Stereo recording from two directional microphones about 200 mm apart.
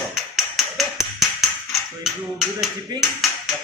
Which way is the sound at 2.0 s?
Centre (ahead or behind).